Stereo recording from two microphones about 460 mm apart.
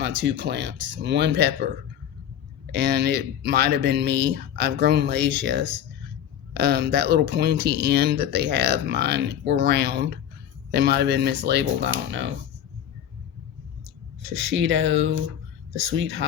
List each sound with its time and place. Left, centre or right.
0.0 s speech: right
2.7 s speech: right
14.3 s speech: right